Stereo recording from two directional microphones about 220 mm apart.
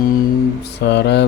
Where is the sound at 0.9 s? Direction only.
50° left (ahead or behind).